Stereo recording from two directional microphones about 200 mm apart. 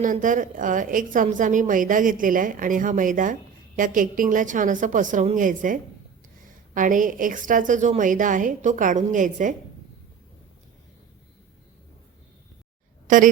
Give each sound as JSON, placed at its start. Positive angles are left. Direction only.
{"t": 0.0, "sound": "a woman's voice", "side_deg": -40}
{"t": 13.1, "sound": "a woman's voice", "side_deg": -40}